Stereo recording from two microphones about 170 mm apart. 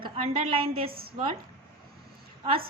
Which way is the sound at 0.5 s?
30° right (ahead or behind).